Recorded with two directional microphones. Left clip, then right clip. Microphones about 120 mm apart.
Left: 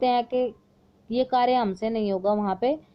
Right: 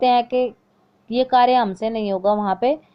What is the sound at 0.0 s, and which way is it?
A woman's voice, 25° right (ahead or behind).